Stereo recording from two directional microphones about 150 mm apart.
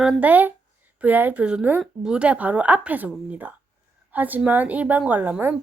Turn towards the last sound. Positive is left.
turn(degrees=-15)  # may be behind; listen again after turning